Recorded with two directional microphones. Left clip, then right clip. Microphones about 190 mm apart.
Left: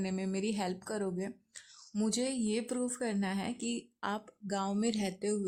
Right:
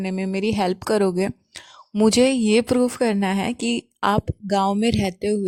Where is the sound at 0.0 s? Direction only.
40° right (ahead or behind).